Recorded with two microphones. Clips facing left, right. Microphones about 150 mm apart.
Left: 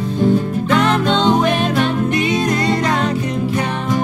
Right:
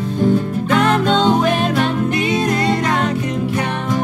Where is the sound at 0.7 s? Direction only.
45° right (ahead or behind).